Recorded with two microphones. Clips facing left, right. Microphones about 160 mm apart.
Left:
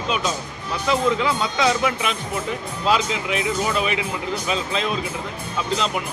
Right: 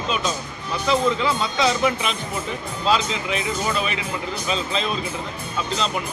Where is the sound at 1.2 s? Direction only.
10° left (ahead or behind).